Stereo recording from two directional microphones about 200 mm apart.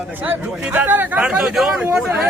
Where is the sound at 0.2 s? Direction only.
10° right (ahead or behind).